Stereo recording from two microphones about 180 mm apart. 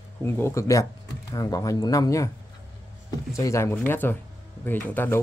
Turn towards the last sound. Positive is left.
turn(degrees=10)  # may be behind; listen again after turning